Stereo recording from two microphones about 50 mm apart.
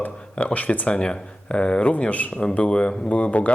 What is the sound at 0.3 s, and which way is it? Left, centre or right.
A man's voice, left.